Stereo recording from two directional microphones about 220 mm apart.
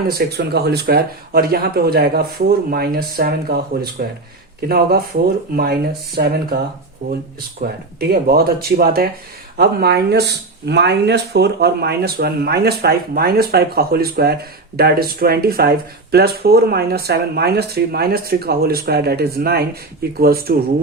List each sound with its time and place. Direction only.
0.1 s speech: 45° right (ahead or behind)
7.6 s speech: 45° right (ahead or behind)